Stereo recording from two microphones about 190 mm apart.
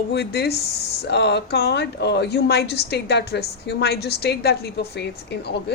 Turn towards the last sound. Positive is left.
turn(degrees=60)  # may be behind; listen again after turning